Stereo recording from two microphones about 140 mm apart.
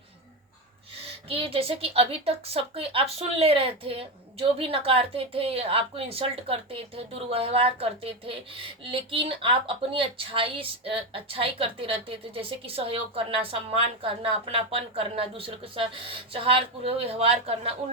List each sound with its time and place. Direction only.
1.0 s a woman's voice: 45° right (ahead or behind)